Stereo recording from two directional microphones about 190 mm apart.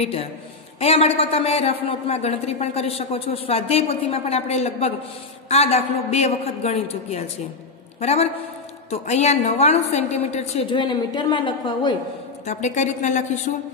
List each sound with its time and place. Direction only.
0.0 s a woman's voice: 30° left (ahead or behind)
12.4 s a woman's voice: 40° left (ahead or behind)